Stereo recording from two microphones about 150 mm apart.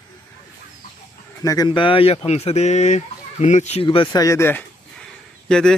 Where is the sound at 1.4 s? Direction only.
25° left (ahead or behind); by 3.8 s 50° left (ahead or behind).